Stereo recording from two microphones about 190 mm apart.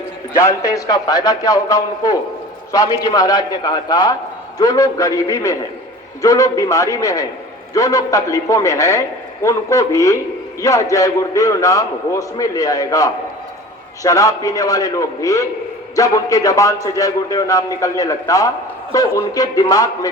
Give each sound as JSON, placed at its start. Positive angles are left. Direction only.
{"t": 0.3, "sound": "a man's voice", "side_deg": 15}